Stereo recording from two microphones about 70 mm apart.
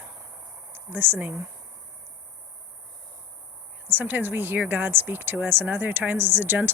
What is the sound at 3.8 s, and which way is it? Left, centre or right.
Speech, right.